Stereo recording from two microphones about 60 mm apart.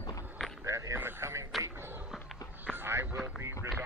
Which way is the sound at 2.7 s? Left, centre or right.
Right.